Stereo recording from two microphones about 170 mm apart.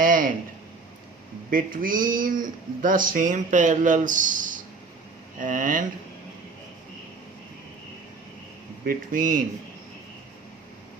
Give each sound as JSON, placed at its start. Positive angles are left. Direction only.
{"t": 0.0, "sound": "a sound", "side_deg": -55}
{"t": 1.5, "sound": "speech", "side_deg": -55}
{"t": 8.8, "sound": "speech", "side_deg": -55}